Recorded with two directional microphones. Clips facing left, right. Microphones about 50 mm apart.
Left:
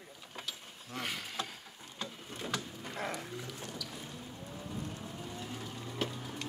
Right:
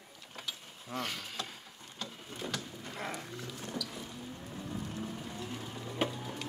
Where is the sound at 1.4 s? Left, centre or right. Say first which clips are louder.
Even; centre.